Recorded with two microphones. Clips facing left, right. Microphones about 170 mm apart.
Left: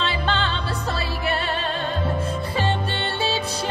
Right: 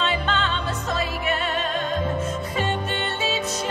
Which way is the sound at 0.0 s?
35° left (ahead or behind).